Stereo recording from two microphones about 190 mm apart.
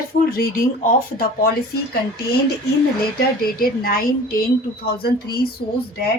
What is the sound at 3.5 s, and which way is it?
Speech, 50° left (ahead or behind).